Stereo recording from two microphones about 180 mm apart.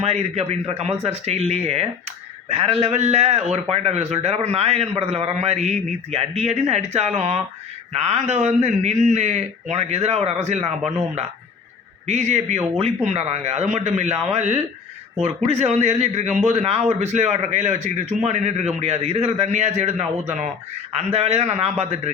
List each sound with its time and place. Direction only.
0.0 s speech: 35° right (ahead or behind)
12.0 s speech: 40° right (ahead or behind)
21.1 s speech: 35° right (ahead or behind)